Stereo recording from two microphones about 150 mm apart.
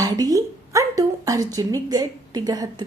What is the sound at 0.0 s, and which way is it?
A woman's voice, 25° right (ahead or behind).